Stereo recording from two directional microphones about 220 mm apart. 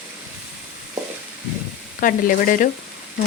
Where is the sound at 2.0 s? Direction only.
40° left (ahead or behind).